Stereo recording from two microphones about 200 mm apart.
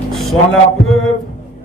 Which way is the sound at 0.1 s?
Centre (ahead or behind).